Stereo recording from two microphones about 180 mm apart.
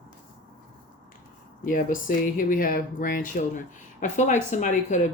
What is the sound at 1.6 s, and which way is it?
Speech, 50° left (ahead or behind).